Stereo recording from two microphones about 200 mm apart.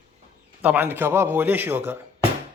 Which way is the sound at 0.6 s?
10° right (ahead or behind).